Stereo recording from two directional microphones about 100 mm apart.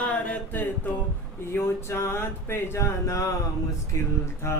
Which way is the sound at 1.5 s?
25° left (ahead or behind).